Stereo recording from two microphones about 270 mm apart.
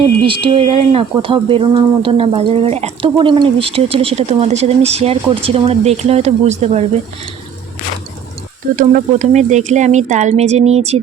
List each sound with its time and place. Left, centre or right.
0.3 s speech: centre
8.7 s speech: right